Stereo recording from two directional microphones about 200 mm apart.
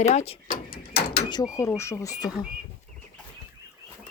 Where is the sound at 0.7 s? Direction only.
50° left (ahead or behind).